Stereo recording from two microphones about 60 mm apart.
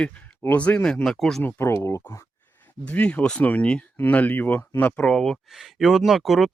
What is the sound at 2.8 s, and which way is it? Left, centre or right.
Speech, left.